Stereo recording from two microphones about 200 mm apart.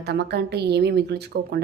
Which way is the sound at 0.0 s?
55° right (ahead or behind).